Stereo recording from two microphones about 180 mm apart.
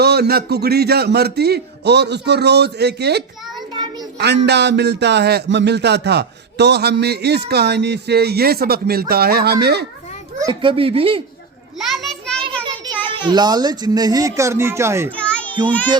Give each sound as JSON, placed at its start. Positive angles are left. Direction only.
{"t": 0.0, "sound": "a man's voice", "side_deg": -65}
{"t": 10.4, "sound": "speech", "side_deg": -25}
{"t": 11.8, "sound": "a child's voice", "side_deg": 0}
{"t": 12.6, "sound": "a child's voice", "side_deg": -25}
{"t": 15.1, "sound": "children playing", "side_deg": 5}